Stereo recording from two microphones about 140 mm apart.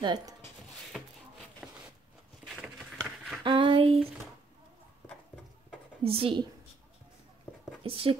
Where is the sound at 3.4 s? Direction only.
35° right (ahead or behind).